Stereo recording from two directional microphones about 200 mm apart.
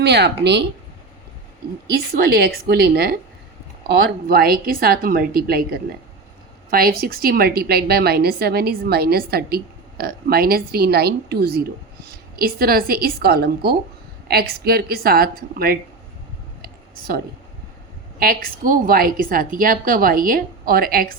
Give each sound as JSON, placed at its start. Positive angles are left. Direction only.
{"t": 0.0, "sound": "speech", "side_deg": -55}
{"t": 1.9, "sound": "a woman's voice", "side_deg": -50}
{"t": 16.6, "sound": "a sound", "side_deg": -45}
{"t": 18.2, "sound": "a woman's voice", "side_deg": -45}